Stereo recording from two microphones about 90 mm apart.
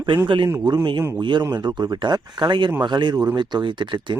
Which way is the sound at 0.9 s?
60° right (ahead or behind).